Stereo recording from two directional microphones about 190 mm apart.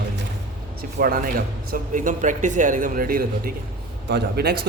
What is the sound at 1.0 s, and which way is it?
A man's voice, 50° right (ahead or behind).